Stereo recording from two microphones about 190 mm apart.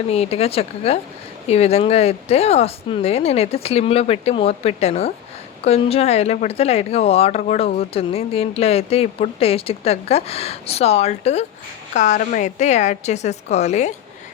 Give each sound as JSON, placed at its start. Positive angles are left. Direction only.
{"t": 0.1, "sound": "speech", "side_deg": 30}